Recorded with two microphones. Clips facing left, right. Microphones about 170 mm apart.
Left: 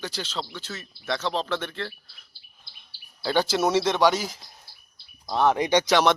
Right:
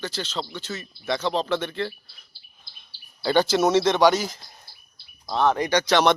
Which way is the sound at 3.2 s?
5° left (ahead or behind).